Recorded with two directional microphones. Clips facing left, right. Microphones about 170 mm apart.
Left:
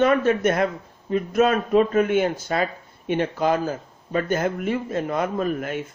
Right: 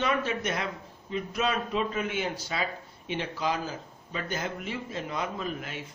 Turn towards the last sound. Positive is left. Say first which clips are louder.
# left 10 dB
turn(degrees=50)  # may be behind; listen again after turning